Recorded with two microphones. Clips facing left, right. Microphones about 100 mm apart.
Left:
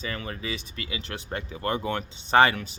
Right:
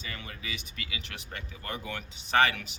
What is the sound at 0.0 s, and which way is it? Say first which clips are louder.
Speech: left 8 dB; 40° left (ahead or behind).